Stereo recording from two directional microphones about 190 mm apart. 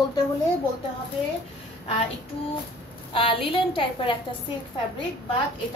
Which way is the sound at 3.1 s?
25° left (ahead or behind).